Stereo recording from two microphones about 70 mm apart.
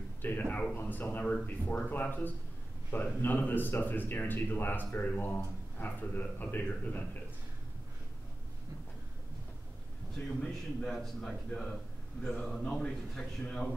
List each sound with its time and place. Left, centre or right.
0.2 s speech: left
10.1 s a man's voice: centre